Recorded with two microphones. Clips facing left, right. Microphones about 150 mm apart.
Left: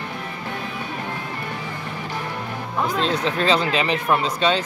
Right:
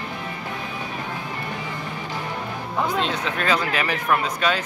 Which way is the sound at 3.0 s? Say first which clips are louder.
Left 3 dB; 35° left (ahead or behind).